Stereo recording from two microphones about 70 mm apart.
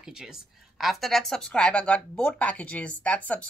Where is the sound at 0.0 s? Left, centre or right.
Centre.